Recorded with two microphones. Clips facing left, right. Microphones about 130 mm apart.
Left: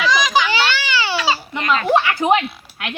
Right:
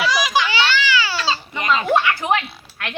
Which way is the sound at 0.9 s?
20° left (ahead or behind).